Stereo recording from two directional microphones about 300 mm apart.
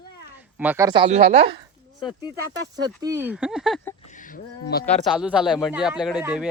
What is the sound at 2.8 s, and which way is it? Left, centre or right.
Speech, centre.